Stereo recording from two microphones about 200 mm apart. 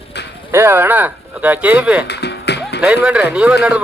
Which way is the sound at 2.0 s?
55° left (ahead or behind).